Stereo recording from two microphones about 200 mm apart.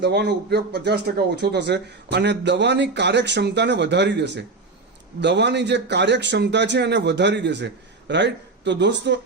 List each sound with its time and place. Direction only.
0.0 s speech: 60° right (ahead or behind)